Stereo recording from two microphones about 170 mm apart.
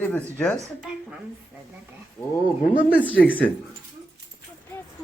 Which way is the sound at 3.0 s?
10° left (ahead or behind).